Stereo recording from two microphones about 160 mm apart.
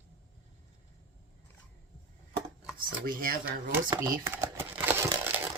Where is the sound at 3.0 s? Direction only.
65° right (ahead or behind).